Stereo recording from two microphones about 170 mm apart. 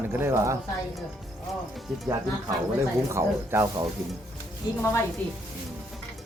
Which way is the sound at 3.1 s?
15° right (ahead or behind).